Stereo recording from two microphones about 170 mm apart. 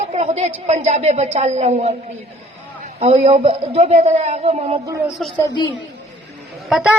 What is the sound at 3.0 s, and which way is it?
Speech, 40° right (ahead or behind).